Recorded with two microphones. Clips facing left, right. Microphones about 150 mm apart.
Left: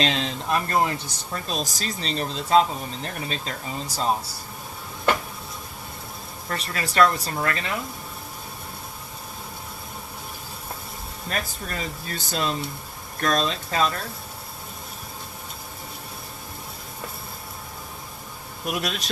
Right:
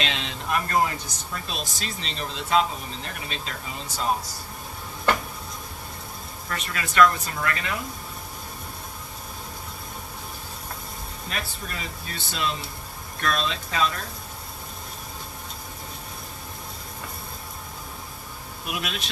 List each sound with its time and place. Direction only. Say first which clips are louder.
0.0 s speech: left 5 dB; 35° left (ahead or behind)
6.5 s speech: left 2 dB; 35° left (ahead or behind)
11.3 s speech: left 4 dB; 45° left (ahead or behind)
18.6 s speech: left 4 dB; 40° left (ahead or behind)